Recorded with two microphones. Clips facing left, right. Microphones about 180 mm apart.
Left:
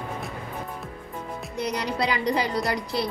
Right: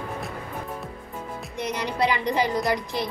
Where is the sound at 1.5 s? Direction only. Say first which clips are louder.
Right 1 dB; 35° left (ahead or behind).